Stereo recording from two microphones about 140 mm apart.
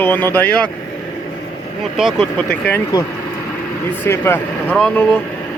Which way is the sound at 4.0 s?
15° left (ahead or behind).